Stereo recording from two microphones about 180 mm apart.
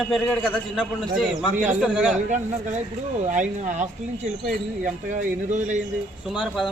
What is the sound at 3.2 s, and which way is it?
Speech, 45° right (ahead or behind).